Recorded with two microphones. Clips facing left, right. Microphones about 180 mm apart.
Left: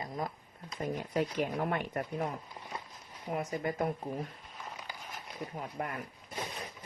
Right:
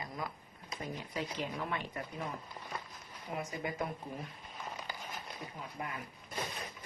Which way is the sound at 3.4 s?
45° left (ahead or behind).